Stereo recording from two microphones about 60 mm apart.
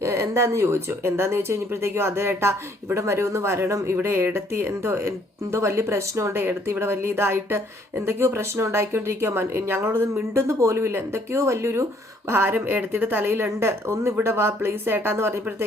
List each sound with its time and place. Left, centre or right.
0.0 s speech: right
6.3 s speech: right
12.3 s speech: right